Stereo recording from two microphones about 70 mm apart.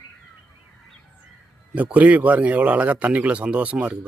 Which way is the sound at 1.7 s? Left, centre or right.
Right.